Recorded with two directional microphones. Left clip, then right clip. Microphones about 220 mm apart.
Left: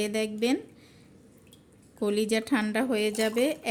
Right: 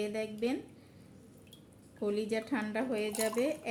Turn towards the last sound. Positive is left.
turn(degrees=50)  # may be behind; listen again after turning